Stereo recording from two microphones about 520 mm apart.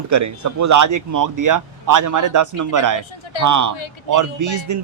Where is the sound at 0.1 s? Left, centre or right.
Right.